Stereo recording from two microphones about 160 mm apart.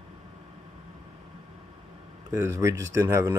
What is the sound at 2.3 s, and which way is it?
Speech, 15° right (ahead or behind).